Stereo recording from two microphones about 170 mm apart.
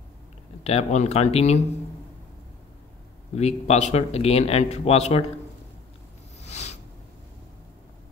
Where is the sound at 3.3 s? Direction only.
40° left (ahead or behind).